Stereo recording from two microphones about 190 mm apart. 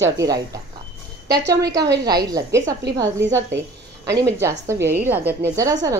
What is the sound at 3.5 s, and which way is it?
Speech, 70° right (ahead or behind).